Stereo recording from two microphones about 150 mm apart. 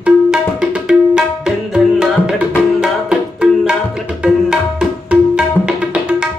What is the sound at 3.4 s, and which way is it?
Music, 5° right (ahead or behind).